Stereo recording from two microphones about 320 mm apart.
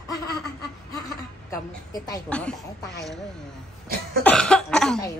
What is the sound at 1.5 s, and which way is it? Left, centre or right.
A woman's voice, centre.